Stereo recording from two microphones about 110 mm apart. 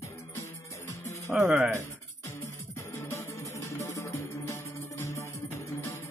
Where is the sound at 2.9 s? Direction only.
25° left (ahead or behind).